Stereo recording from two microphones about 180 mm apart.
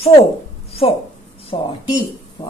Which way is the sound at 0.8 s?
35° left (ahead or behind).